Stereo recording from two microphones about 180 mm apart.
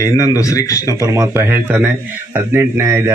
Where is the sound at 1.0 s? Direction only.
15° right (ahead or behind).